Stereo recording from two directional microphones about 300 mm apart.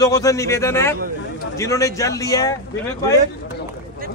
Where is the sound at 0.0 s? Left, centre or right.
Centre.